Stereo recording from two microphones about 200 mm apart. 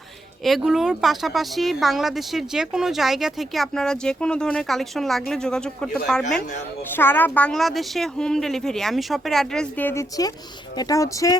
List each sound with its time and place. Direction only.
0.4 s speech: centre (ahead or behind); by 11.3 s 15° left (ahead or behind)